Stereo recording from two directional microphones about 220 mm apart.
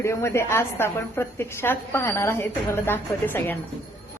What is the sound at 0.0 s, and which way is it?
A woman's voice, 10° left (ahead or behind).